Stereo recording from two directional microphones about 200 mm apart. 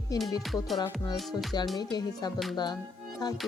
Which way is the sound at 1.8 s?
20° left (ahead or behind).